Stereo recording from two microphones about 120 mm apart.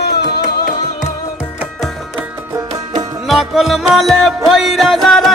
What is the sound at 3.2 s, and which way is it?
Music, centre (ahead or behind).